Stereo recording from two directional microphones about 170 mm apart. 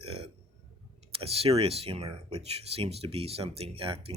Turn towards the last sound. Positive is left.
turn(degrees=-35)  # may be behind; listen again after turning